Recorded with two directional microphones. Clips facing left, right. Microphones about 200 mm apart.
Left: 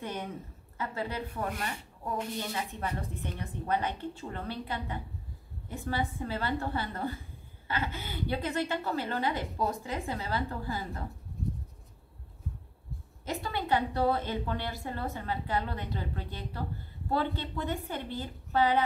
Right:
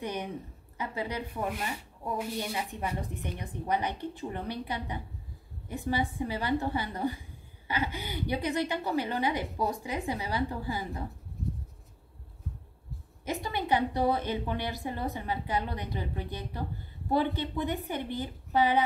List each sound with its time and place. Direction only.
0.0 s a woman's voice: 15° right (ahead or behind)
13.2 s a woman's voice: 15° right (ahead or behind)